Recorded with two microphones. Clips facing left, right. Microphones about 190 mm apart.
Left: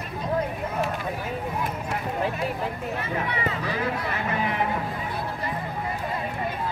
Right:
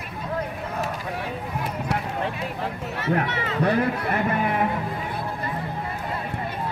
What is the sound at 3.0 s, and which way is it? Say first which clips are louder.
Speech: right 6 dB; 70° right (ahead or behind).